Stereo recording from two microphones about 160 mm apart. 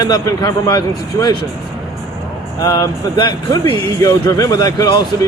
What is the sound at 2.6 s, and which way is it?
Speech, 25° left (ahead or behind).